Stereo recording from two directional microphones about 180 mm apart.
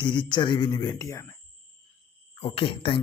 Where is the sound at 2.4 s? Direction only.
30° left (ahead or behind).